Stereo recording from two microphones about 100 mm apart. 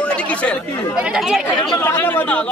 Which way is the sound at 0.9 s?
5° right (ahead or behind).